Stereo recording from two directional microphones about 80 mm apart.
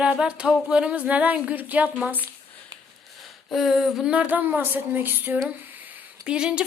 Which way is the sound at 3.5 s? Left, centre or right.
Centre.